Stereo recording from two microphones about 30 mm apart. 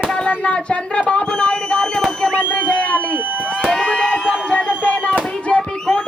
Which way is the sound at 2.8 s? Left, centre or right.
Left.